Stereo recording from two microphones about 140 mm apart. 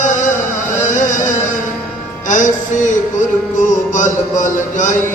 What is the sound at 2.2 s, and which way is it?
Music, 65° left (ahead or behind).